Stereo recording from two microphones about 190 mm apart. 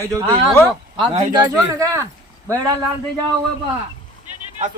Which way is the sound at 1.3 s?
15° right (ahead or behind).